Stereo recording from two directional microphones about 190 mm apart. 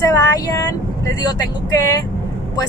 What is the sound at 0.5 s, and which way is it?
Speech, 15° left (ahead or behind).